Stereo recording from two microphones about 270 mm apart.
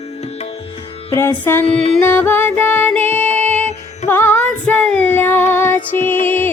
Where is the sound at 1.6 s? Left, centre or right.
Left.